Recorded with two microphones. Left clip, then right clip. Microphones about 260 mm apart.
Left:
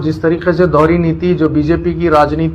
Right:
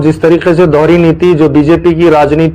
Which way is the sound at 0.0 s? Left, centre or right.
Right.